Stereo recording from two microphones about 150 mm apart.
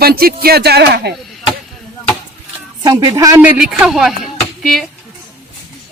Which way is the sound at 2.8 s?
25° right (ahead or behind).